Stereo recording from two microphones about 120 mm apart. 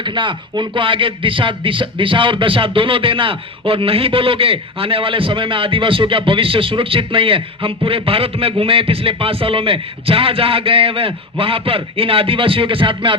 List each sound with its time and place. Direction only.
0.0 s speech: 40° right (ahead or behind)